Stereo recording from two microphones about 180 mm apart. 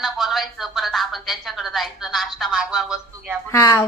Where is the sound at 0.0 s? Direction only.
Centre (ahead or behind).